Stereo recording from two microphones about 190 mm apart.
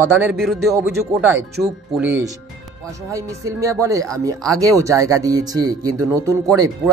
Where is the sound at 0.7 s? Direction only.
15° right (ahead or behind).